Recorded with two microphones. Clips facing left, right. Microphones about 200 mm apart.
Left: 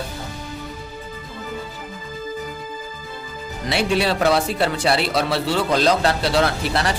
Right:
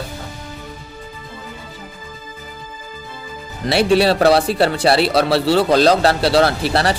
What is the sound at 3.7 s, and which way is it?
Speech, 35° right (ahead or behind).